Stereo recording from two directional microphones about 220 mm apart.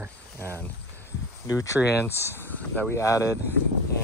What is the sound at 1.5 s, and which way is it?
Speech, 15° left (ahead or behind).